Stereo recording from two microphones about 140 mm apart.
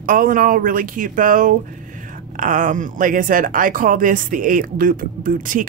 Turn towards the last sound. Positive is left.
turn(degrees=-70)  # may be behind; listen again after turning